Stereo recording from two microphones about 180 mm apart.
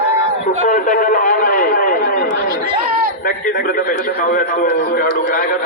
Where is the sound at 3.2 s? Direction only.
50° left (ahead or behind).